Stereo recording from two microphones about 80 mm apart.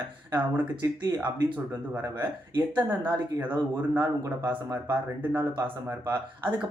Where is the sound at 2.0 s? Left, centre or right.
Right.